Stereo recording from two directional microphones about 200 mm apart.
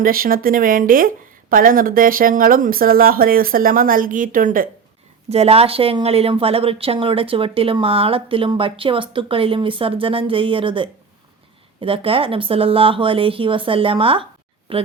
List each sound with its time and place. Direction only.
0.0 s speech: 45° right (ahead or behind)
5.3 s speech: 30° right (ahead or behind)